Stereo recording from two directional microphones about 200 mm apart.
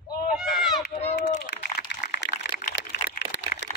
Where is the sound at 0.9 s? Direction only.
35° left (ahead or behind).